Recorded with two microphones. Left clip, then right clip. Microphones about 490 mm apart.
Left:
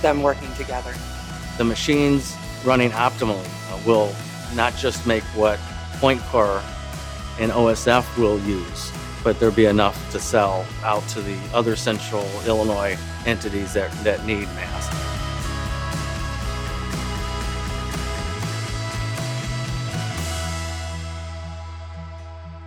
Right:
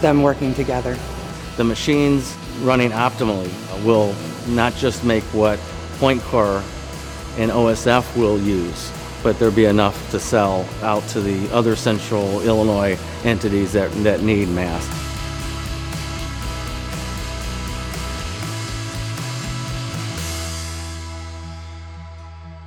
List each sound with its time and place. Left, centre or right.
0.0 s a man's voice: right